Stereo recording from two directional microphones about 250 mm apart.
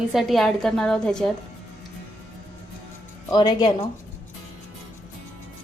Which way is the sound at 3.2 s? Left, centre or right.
Centre.